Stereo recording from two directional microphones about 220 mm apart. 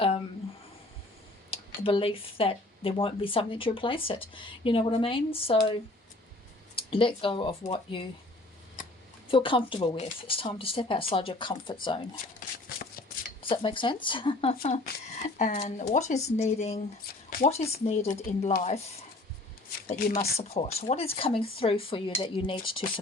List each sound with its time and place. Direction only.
1.5 s speech: 25° left (ahead or behind)
6.9 s speech: 25° left (ahead or behind)
9.3 s speech: 25° left (ahead or behind)
12.4 s a sound: 35° left (ahead or behind)
13.4 s speech: 25° left (ahead or behind)
19.9 s speech: 30° left (ahead or behind)